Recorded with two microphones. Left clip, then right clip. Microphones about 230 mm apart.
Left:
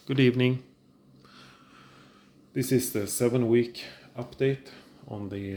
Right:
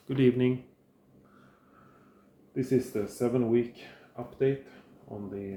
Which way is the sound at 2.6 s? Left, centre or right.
Left.